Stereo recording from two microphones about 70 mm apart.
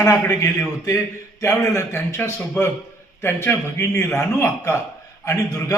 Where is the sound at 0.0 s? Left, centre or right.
Left.